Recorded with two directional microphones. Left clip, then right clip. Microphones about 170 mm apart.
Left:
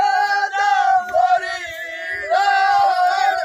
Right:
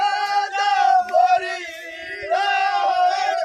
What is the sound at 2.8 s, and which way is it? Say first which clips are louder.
Crowd: left 3 dB; 35° right (ahead or behind).